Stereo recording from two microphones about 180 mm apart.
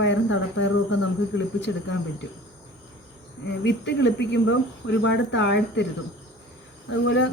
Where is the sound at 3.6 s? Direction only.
75° left (ahead or behind).